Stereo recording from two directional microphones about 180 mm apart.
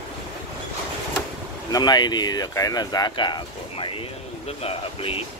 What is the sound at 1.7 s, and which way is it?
Speech, 25° left (ahead or behind).